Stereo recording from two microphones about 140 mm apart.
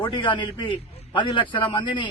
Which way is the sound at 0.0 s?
35° left (ahead or behind).